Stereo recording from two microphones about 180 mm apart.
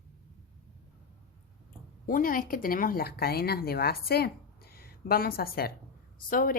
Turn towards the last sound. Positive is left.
turn(degrees=50)  # may be behind; listen again after turning